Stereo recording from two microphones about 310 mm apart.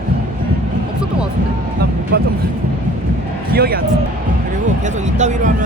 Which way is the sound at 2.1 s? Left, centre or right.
Right.